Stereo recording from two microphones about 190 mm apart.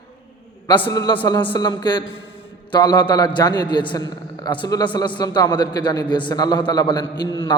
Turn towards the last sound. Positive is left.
turn(degrees=25)  # may be behind; listen again after turning